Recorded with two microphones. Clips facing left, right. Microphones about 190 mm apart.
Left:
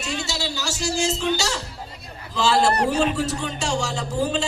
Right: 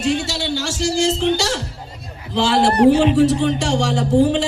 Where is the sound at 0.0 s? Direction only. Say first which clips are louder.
Right 8 dB; 50° right (ahead or behind).